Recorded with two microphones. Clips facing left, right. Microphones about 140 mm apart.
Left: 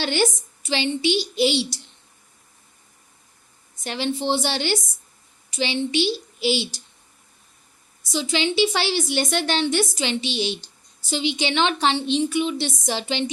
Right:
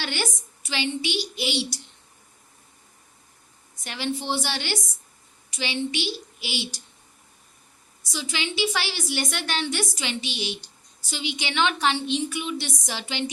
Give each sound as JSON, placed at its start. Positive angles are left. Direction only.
{"t": 0.0, "sound": "a woman's voice", "side_deg": 25}
{"t": 3.8, "sound": "a woman's voice", "side_deg": 25}
{"t": 8.1, "sound": "a woman's voice", "side_deg": 25}